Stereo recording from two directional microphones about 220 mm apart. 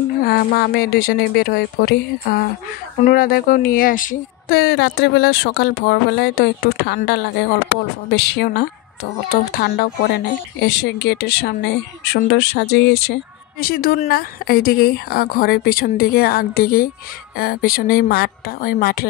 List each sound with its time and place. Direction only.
0.2 s speech: 45° left (ahead or behind)